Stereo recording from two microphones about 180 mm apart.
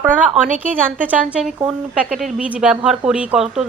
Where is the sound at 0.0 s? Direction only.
10° right (ahead or behind).